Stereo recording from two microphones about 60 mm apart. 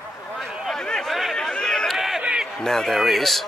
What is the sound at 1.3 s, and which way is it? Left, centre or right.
Run, centre.